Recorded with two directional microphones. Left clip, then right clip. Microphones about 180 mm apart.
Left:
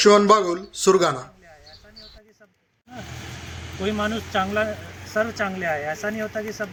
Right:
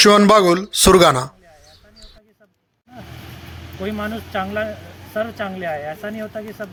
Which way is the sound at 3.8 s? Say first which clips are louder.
Left 1 dB; 5° right (ahead or behind).